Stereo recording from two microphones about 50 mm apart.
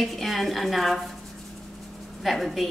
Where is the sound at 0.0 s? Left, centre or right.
Centre.